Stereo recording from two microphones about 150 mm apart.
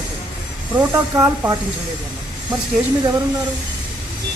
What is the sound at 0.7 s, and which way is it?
Speech, 20° right (ahead or behind).